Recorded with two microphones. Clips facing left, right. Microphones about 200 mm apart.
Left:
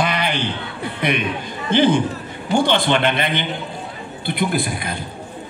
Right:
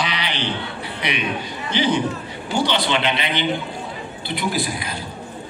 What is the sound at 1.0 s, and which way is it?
A man's voice, 50° left (ahead or behind).